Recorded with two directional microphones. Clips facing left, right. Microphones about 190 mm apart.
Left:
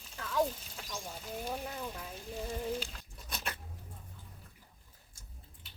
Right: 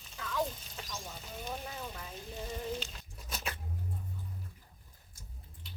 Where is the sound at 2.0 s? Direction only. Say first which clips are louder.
Left 2 dB; 10° left (ahead or behind).